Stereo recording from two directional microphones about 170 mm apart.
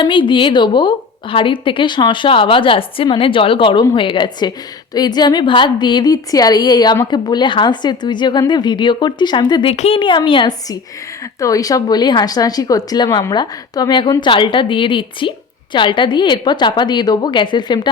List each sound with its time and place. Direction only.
0.0 s a woman's voice: 30° left (ahead or behind)